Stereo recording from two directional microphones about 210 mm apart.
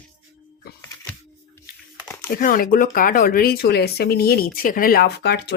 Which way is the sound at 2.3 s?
45° left (ahead or behind).